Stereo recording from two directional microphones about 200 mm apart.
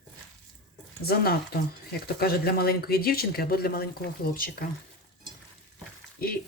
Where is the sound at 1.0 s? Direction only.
50° left (ahead or behind).